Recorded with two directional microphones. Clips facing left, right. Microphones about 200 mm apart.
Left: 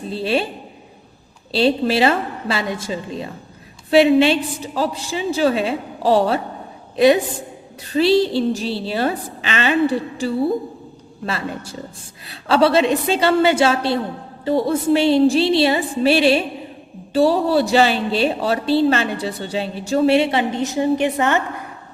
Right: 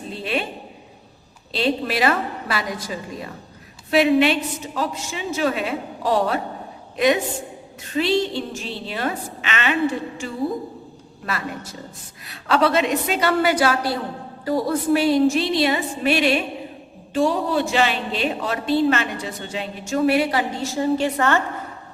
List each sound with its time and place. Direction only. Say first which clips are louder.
0.1 s a woman's voice: left 6 dB; 30° left (ahead or behind)
1.5 s a woman's voice: left 5 dB; 30° left (ahead or behind)